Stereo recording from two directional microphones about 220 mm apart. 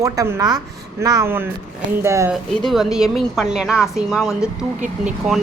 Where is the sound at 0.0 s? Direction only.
15° right (ahead or behind).